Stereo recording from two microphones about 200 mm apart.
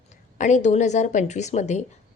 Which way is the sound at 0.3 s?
35° left (ahead or behind).